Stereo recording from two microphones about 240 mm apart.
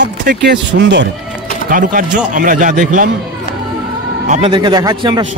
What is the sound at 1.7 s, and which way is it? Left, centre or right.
A man's voice, right.